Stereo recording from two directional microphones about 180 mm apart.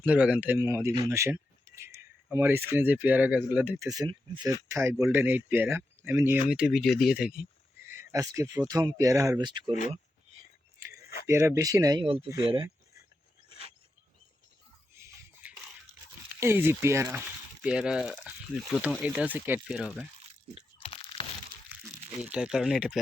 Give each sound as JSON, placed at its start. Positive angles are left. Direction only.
{"t": 0.0, "sound": "speech", "side_deg": -5}
{"t": 7.9, "sound": "speech", "side_deg": -20}
{"t": 11.3, "sound": "speech", "side_deg": -15}
{"t": 14.9, "sound": "a sound", "side_deg": -15}
{"t": 16.4, "sound": "speech", "side_deg": -15}
{"t": 20.7, "sound": "crunch", "side_deg": 30}
{"t": 22.2, "sound": "speech", "side_deg": -5}